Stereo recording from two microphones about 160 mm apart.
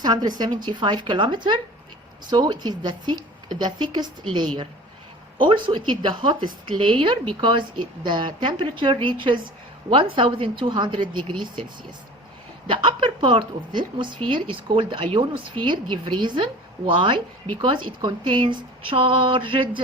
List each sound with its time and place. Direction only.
0.0 s a woman's voice: 25° right (ahead or behind)
5.4 s speech: 30° right (ahead or behind)
12.6 s speech: 30° right (ahead or behind)